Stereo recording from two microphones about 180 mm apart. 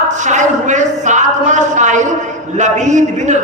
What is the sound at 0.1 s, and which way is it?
A man's voice, 40° right (ahead or behind).